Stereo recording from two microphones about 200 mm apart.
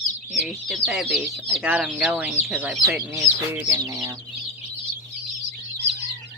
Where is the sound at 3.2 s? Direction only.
15° right (ahead or behind).